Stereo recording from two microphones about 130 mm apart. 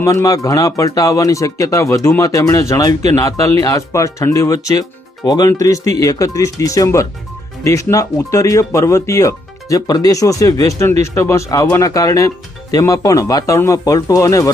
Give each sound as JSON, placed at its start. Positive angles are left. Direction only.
{"t": 0.0, "sound": "speech", "side_deg": 25}